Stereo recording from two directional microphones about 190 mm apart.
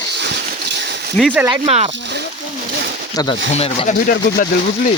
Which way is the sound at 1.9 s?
60° right (ahead or behind).